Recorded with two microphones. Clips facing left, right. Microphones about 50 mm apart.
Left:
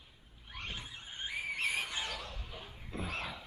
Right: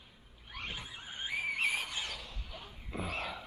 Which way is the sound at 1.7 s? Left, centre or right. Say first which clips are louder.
Left 1 dB; centre.